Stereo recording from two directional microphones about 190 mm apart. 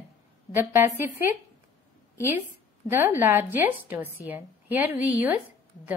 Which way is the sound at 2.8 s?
10° right (ahead or behind).